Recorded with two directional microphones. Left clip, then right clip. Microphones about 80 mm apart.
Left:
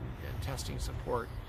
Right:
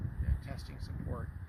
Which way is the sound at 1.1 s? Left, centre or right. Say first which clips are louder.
Left 12 dB; left.